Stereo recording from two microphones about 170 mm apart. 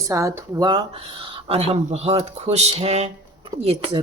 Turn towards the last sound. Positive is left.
turn(degrees=-35)  # may be behind; listen again after turning